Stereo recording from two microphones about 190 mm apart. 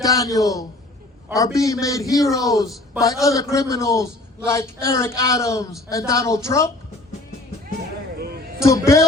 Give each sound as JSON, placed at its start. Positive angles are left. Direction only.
{"t": 0.0, "sound": "a man's voice", "side_deg": 20}
{"t": 8.6, "sound": "a man's voice", "side_deg": 15}